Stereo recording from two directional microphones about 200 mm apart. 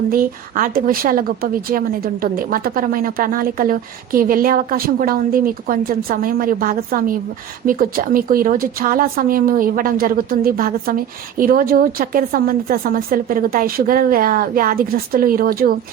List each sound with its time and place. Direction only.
0.1 s speech: 45° right (ahead or behind)